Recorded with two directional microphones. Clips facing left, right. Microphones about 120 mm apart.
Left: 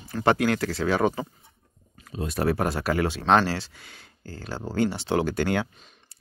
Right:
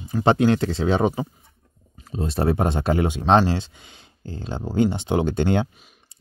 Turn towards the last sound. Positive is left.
turn(degrees=-25)  # may be behind; listen again after turning